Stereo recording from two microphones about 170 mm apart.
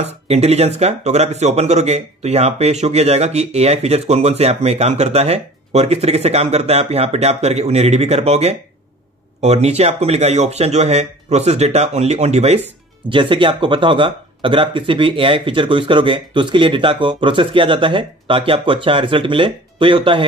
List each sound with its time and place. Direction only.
0.0 s speech: 40° right (ahead or behind)
13.1 s speech: 30° right (ahead or behind)